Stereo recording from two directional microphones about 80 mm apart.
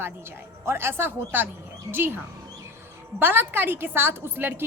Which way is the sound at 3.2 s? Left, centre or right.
Right.